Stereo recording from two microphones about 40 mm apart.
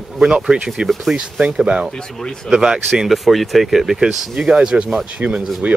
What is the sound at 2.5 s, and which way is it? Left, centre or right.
Speech, centre.